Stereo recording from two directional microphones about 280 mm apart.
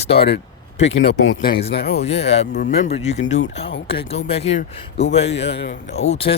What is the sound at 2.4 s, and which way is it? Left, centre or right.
Speech, left.